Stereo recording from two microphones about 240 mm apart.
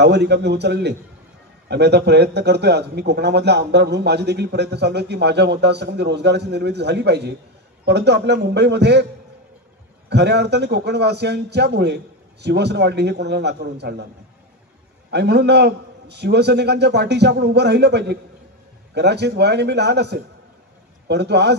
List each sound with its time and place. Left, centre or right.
0.0 s a man's voice: right
10.0 s a man's voice: right
15.0 s a man's voice: right